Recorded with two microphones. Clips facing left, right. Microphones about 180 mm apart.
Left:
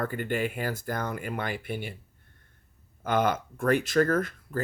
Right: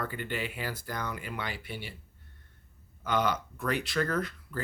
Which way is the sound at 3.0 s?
50° left (ahead or behind).